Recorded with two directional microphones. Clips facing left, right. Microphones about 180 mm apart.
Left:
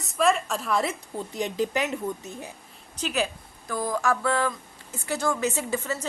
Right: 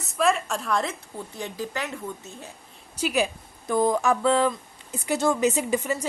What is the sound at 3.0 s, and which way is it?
Speech, 15° right (ahead or behind).